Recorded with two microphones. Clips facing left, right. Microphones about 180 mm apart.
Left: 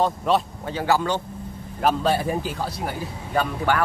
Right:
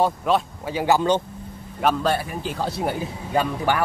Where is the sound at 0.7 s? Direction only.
20° right (ahead or behind).